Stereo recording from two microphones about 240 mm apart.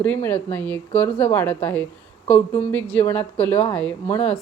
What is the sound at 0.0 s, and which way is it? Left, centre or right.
A woman's voice, centre.